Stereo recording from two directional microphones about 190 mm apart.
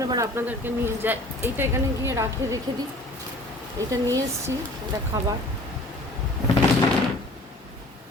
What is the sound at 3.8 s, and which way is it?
Speech, 15° right (ahead or behind).